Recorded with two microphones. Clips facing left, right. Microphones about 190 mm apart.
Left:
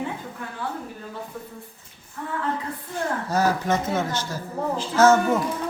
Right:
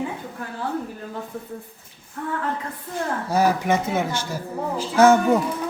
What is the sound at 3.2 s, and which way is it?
Speech, 10° right (ahead or behind).